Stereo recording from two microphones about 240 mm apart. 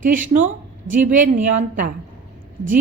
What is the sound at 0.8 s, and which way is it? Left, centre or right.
Speech, right.